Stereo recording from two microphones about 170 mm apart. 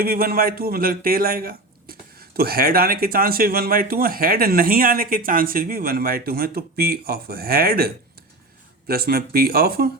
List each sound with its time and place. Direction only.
0.0 s a man's voice: 60° right (ahead or behind)